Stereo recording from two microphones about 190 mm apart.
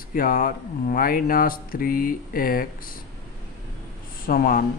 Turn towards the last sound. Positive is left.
turn(degrees=50)  # may be behind; listen again after turning